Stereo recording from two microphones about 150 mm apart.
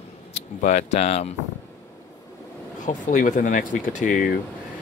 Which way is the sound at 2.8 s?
55° left (ahead or behind).